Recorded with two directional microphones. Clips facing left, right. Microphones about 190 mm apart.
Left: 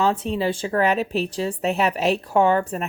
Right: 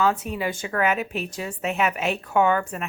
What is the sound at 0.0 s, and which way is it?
A woman's voice, 30° left (ahead or behind).